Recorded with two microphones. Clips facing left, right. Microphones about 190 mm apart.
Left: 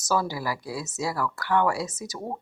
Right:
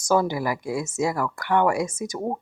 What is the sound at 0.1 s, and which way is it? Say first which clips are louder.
Speech: right 5 dB; 20° right (ahead or behind).